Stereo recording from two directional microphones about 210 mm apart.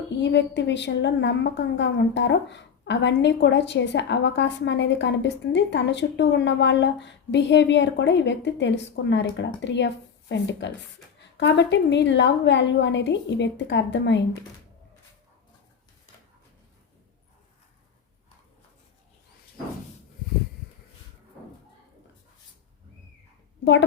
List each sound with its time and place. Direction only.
0.2 s a woman's voice: 55° left (ahead or behind)